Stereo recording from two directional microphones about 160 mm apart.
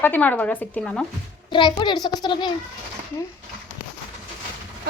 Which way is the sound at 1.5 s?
30° left (ahead or behind).